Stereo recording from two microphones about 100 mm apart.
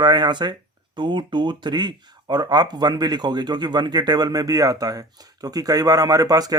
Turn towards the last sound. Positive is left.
turn(degrees=-40)  # may be behind; listen again after turning